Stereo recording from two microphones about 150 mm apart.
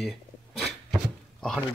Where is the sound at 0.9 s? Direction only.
Centre (ahead or behind).